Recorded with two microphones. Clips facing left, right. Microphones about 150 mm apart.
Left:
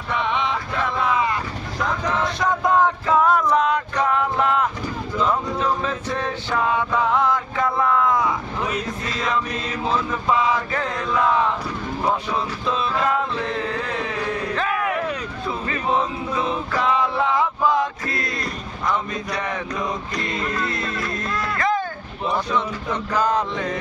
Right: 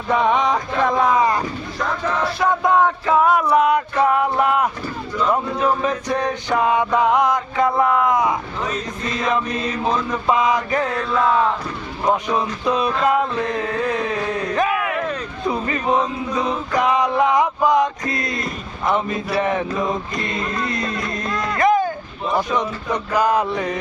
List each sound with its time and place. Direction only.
0.1 s a sound: 40° right (ahead or behind)
2.1 s male singing: 5° right (ahead or behind)
10.2 s male singing: 15° right (ahead or behind)
12.0 s male singing: 15° right (ahead or behind)
14.5 s a sound: 15° right (ahead or behind)
16.3 s male singing: 15° right (ahead or behind)
18.9 s speech: 25° right (ahead or behind)
21.5 s a sound: 15° right (ahead or behind)
22.5 s male singing: 15° right (ahead or behind)